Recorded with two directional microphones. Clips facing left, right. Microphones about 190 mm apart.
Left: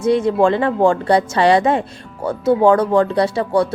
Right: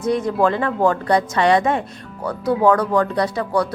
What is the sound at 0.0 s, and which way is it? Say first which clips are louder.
Speech: left 4 dB; 30° left (ahead or behind).